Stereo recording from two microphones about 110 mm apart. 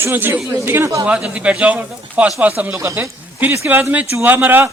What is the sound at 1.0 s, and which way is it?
Speech, 10° right (ahead or behind).